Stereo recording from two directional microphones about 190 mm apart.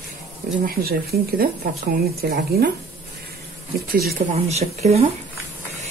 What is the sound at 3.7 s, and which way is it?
Speech, 55° right (ahead or behind).